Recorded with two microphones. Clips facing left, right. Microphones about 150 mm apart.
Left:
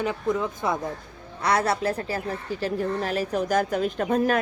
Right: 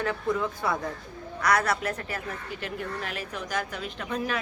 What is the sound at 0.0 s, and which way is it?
Speech, 20° left (ahead or behind).